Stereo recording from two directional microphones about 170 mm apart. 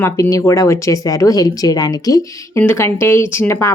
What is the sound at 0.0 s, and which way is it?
Speech, 20° left (ahead or behind).